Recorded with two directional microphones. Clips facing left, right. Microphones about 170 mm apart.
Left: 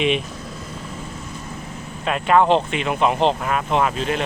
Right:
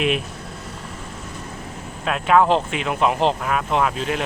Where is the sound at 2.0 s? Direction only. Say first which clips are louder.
Even; centre (ahead or behind).